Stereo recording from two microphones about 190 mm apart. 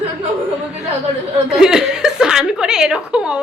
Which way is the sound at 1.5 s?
5° right (ahead or behind).